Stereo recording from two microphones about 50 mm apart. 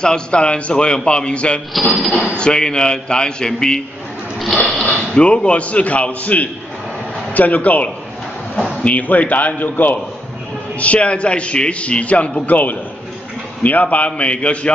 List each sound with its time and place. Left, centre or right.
0.0 s a man's voice: centre
1.7 s speech: centre
2.3 s speech: centre
4.8 s a man's voice: left
10.8 s a man's voice: left